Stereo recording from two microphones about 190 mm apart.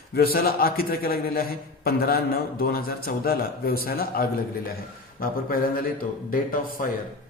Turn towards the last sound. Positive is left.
turn(degrees=50)  # may be behind; listen again after turning